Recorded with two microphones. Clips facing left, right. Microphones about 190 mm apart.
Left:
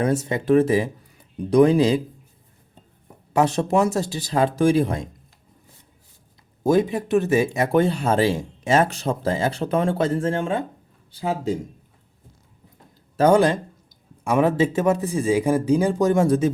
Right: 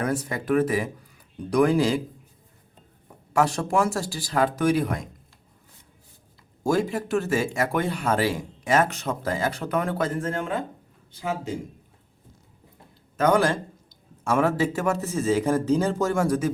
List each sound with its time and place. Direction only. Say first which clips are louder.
0.0 s speech: left 5 dB; 25° left (ahead or behind)
3.3 s speech: left 3 dB; 20° left (ahead or behind)
6.6 s speech: left 5 dB; 20° left (ahead or behind)
13.1 s speech: left 4 dB; 25° left (ahead or behind)